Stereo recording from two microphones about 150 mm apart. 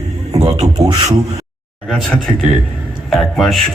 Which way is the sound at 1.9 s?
Centre (ahead or behind).